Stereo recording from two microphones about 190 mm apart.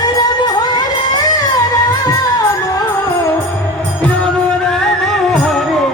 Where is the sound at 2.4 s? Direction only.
20° left (ahead or behind).